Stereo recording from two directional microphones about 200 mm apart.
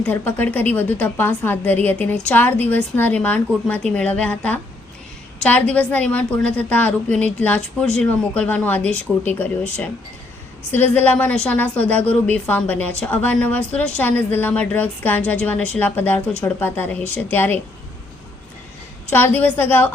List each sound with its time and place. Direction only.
0.0 s a woman's voice: 10° left (ahead or behind)
19.1 s a woman's voice: 10° left (ahead or behind)